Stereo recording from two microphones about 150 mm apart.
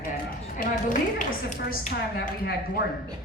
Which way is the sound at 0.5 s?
65° left (ahead or behind).